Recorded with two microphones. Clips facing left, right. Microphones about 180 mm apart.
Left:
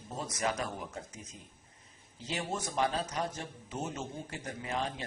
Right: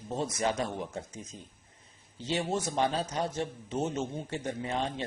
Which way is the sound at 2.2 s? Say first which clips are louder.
Right 6 dB; 25° right (ahead or behind).